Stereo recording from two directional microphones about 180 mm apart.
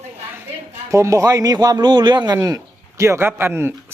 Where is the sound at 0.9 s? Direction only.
15° right (ahead or behind).